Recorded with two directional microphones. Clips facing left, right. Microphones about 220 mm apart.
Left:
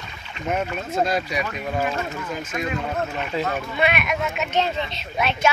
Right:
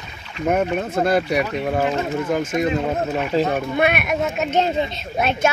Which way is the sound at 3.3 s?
35° right (ahead or behind).